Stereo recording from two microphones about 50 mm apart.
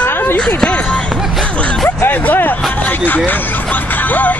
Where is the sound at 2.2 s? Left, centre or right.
Left.